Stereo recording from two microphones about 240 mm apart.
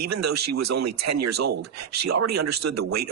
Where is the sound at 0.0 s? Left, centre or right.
Right.